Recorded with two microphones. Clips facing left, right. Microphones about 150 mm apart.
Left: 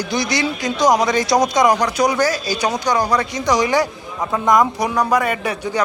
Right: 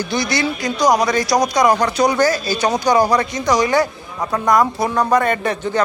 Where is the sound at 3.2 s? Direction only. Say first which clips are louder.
Right 1 dB; 15° left (ahead or behind).